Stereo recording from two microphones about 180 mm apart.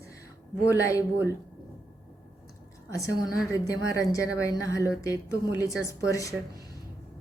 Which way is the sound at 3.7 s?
20° left (ahead or behind).